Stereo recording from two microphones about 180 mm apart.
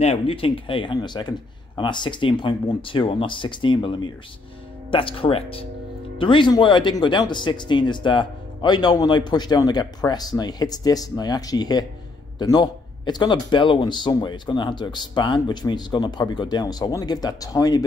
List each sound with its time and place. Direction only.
0.0 s speech: 35° left (ahead or behind)